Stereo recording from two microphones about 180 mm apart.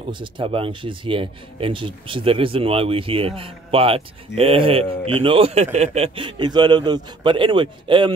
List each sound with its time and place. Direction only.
0.1 s speech: 25° right (ahead or behind)